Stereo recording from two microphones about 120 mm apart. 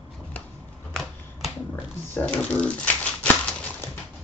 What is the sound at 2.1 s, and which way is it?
Speech, 10° left (ahead or behind).